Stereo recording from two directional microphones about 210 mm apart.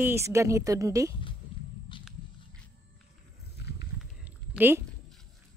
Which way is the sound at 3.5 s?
50° left (ahead or behind).